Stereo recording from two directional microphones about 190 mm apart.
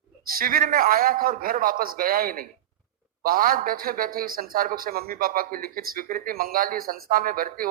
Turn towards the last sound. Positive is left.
turn(degrees=-50)  # may be behind; listen again after turning